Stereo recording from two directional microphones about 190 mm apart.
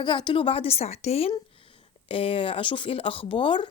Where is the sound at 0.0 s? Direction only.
25° left (ahead or behind).